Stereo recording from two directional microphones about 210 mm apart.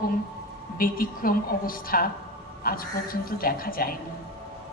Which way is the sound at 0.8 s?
45° left (ahead or behind).